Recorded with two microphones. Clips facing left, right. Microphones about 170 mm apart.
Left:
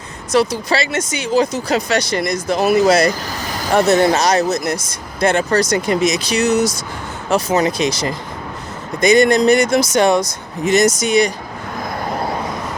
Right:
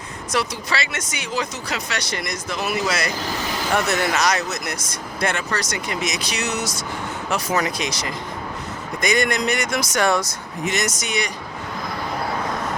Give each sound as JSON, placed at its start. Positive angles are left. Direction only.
{"t": 0.3, "sound": "speech", "side_deg": 30}
{"t": 10.7, "sound": "speech", "side_deg": 30}